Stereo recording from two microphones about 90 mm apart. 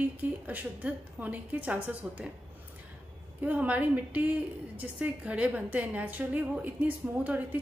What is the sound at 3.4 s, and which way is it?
A woman's voice, 15° right (ahead or behind).